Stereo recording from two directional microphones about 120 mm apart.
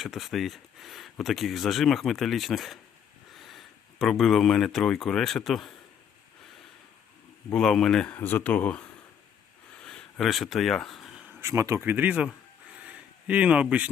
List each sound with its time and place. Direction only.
0.0 s speech: centre (ahead or behind)
7.5 s speech: 5° left (ahead or behind)
8.1 s speech: 15° left (ahead or behind)
9.8 s a sound: 5° left (ahead or behind)
11.3 s speech: 25° right (ahead or behind)
12.7 s a sound: 10° right (ahead or behind)